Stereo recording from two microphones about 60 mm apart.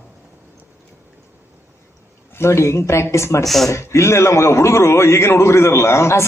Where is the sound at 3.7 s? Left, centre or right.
Left.